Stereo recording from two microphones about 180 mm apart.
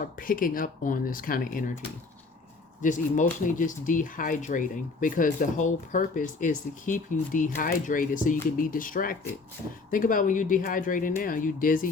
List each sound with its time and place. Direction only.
0.0 s speech: 50° left (ahead or behind)
2.8 s speech: 45° left (ahead or behind)